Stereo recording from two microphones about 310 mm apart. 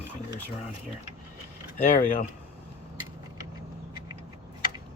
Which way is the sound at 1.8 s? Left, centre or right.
Left.